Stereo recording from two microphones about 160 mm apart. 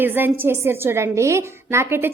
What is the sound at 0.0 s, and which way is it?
A woman's voice, 10° right (ahead or behind).